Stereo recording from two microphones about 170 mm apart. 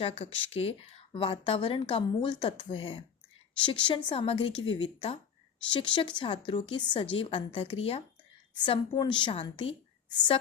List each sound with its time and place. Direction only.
0.0 s a woman's voice: 35° left (ahead or behind)